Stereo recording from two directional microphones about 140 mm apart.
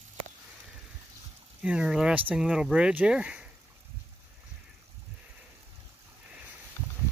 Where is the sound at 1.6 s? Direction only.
5° right (ahead or behind).